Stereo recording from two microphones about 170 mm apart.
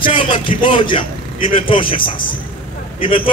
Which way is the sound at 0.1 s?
30° left (ahead or behind).